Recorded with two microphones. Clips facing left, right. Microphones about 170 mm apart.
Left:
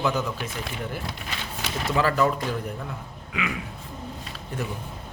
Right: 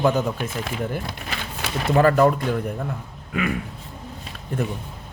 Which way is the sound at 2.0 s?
50° right (ahead or behind).